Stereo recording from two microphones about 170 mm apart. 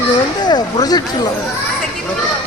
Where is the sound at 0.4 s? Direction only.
25° left (ahead or behind).